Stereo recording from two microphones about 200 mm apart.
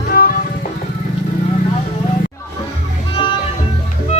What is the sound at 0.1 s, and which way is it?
Music, 45° left (ahead or behind).